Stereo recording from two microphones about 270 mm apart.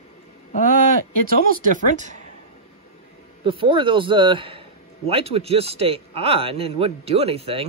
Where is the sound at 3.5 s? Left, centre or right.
Centre.